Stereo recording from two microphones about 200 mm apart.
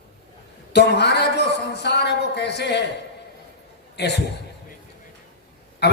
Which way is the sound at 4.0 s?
60° left (ahead or behind).